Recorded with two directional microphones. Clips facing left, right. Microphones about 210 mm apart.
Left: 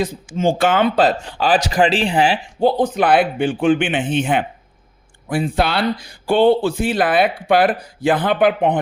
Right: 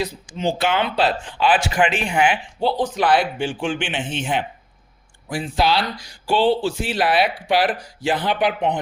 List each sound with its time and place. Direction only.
0.3 s speech: 50° left (ahead or behind); by 2.4 s 35° left (ahead or behind)
2.6 s speech: 50° left (ahead or behind)